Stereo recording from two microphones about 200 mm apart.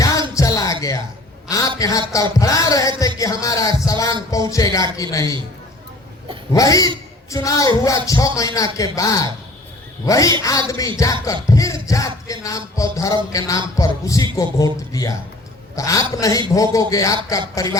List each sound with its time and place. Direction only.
0.0 s music: 15° left (ahead or behind)
1.5 s a man's voice: 15° left (ahead or behind)
1.8 s music: 15° left (ahead or behind)
6.5 s music: 15° left (ahead or behind)
15.7 s a man's voice: 15° left (ahead or behind)
16.1 s music: 15° left (ahead or behind)